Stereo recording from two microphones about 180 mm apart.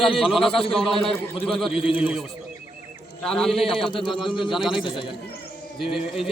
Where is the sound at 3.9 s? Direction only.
25° left (ahead or behind).